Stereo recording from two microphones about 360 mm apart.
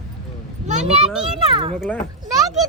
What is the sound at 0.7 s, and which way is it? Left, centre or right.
Speech, centre.